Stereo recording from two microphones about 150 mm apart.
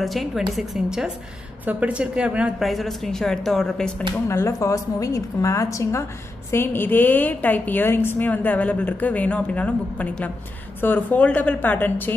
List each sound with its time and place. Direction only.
0.0 s a woman's voice: centre (ahead or behind)
4.3 s a woman's voice: 20° left (ahead or behind)